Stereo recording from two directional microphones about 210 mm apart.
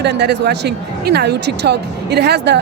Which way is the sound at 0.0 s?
55° right (ahead or behind).